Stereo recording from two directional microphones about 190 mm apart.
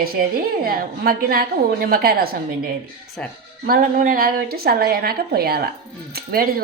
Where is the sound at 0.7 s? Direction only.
50° right (ahead or behind).